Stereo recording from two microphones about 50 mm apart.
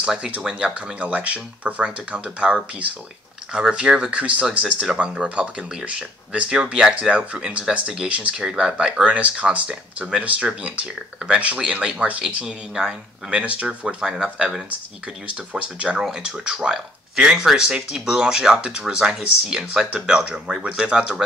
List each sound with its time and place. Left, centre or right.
0.0 s speech: centre
0.9 s speech: right
12.7 s speech: centre
13.4 s speech: right
13.7 s speech: centre